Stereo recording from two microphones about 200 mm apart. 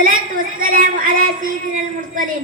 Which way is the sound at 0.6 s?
45° right (ahead or behind).